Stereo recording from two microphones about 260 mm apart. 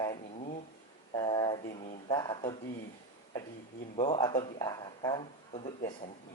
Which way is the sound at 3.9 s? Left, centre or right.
Left.